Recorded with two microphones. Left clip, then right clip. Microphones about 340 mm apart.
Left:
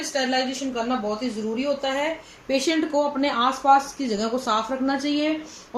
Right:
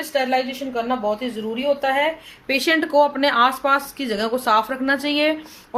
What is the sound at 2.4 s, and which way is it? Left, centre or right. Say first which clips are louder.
Speech: right 4 dB; right.